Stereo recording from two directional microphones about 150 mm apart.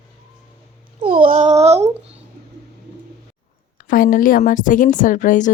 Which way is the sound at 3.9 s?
70° left (ahead or behind).